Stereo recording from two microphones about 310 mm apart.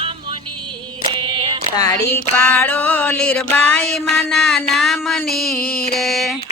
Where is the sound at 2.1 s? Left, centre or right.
Centre.